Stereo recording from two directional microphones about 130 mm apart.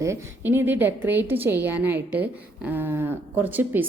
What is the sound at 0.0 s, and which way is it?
A woman's voice, 20° right (ahead or behind).